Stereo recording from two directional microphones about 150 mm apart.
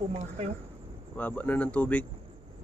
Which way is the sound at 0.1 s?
50° right (ahead or behind).